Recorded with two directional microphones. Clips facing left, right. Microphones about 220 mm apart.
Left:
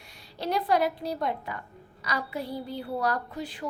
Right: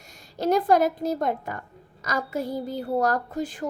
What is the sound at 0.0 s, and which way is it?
A woman's voice, 45° right (ahead or behind).